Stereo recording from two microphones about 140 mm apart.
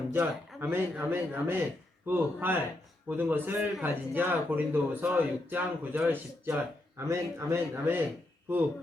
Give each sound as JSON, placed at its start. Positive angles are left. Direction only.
{"t": 0.1, "sound": "a man's voice", "side_deg": -15}